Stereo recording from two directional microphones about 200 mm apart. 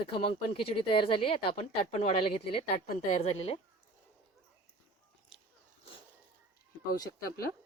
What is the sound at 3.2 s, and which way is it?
Speech, 30° left (ahead or behind).